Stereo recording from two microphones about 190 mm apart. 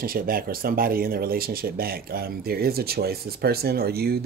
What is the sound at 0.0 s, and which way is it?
Speech, 50° right (ahead or behind).